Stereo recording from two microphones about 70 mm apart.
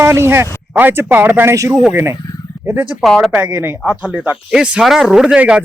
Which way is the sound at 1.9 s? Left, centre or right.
Right.